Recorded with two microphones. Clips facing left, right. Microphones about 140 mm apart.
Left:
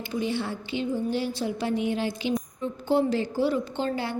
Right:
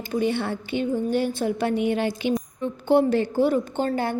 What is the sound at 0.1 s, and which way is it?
A woman's voice, 60° right (ahead or behind).